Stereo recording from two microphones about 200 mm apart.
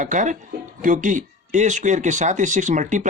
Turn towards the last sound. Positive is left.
turn(degrees=-40)  # may be behind; listen again after turning